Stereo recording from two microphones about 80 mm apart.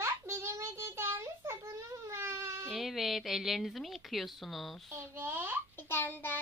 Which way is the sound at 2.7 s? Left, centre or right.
Centre.